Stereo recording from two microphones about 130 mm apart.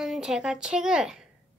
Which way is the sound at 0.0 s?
Centre (ahead or behind).